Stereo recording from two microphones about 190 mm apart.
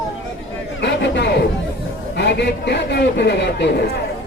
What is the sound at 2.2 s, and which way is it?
A man's voice, 65° left (ahead or behind).